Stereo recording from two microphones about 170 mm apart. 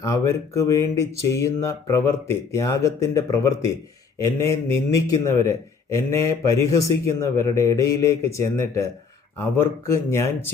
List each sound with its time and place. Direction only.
0.0 s a man's voice: 20° left (ahead or behind)